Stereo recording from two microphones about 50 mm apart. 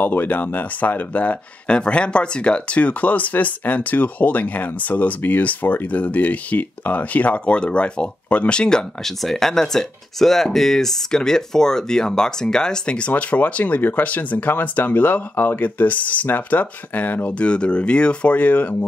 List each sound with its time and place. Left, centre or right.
0.0 s speech: left
13.1 s speech: left
17.3 s speech: left